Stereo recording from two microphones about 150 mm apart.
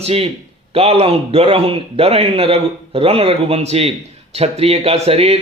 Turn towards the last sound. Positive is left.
turn(degrees=-45)  # may be behind; listen again after turning